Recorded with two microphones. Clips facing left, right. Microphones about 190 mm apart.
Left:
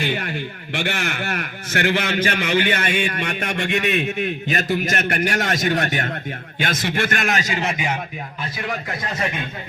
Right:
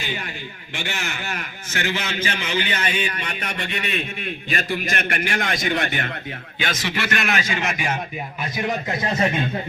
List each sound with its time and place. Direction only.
0.0 s a man's voice: 55° left (ahead or behind); by 7.9 s 30° left (ahead or behind)
8.5 s a man's voice: 20° right (ahead or behind)